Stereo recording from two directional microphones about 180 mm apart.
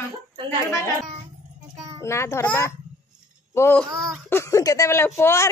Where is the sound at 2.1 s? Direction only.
15° left (ahead or behind).